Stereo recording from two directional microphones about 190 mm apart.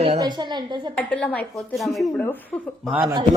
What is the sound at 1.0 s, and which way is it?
A woman's voice, 5° left (ahead or behind).